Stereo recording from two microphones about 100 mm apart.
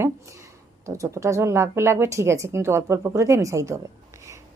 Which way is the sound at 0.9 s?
30° right (ahead or behind).